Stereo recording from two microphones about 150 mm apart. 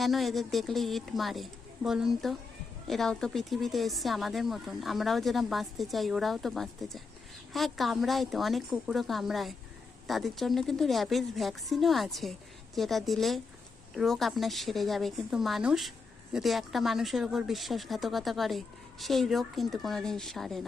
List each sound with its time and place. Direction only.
0.0 s speech: centre (ahead or behind)